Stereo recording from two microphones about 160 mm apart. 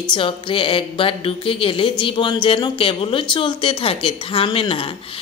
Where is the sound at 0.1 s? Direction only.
30° left (ahead or behind).